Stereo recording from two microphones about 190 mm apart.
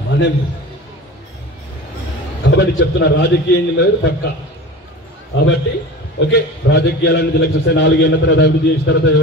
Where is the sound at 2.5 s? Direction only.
65° left (ahead or behind).